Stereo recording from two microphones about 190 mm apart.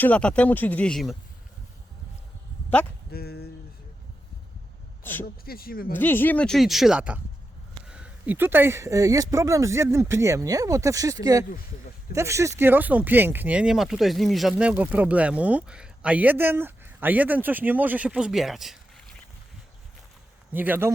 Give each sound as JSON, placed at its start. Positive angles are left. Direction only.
{"t": 0.0, "sound": "speech", "side_deg": 5}
{"t": 3.1, "sound": "speech", "side_deg": 55}
{"t": 5.5, "sound": "speech", "side_deg": 50}
{"t": 5.9, "sound": "speech", "side_deg": 10}
{"t": 20.5, "sound": "speech", "side_deg": -10}